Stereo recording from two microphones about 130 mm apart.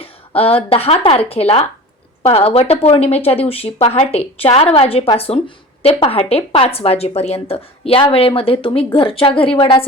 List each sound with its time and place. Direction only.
0.0 s a woman's voice: 50° left (ahead or behind)